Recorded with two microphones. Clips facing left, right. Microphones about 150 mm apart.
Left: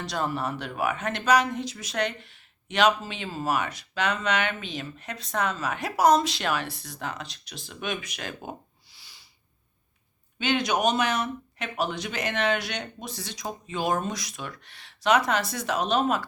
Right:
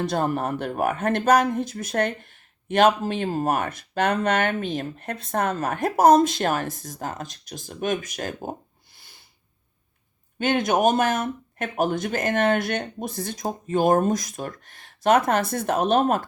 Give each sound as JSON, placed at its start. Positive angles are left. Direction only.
{"t": 0.0, "sound": "speech", "side_deg": -50}
{"t": 10.3, "sound": "speech", "side_deg": -50}